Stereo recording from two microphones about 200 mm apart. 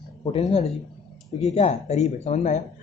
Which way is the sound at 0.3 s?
30° left (ahead or behind).